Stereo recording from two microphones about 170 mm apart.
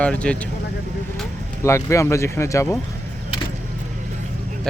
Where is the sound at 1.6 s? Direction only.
15° left (ahead or behind).